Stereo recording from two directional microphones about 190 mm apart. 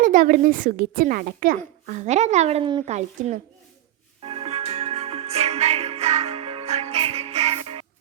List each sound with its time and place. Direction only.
0.0 s a child's voice: 45° right (ahead or behind)
4.3 s music: 30° right (ahead or behind)